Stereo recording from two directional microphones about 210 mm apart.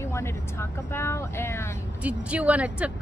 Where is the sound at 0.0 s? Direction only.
10° left (ahead or behind).